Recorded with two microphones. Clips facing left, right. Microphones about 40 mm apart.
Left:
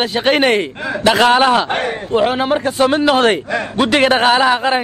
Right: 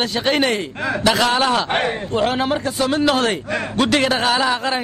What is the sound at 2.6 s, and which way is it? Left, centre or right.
Speech, left.